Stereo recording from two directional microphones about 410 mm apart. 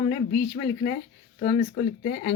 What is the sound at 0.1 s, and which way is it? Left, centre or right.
Speech, centre.